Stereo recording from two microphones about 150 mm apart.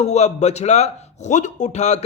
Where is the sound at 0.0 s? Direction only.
50° left (ahead or behind).